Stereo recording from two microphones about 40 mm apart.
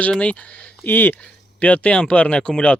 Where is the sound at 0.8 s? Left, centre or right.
Left.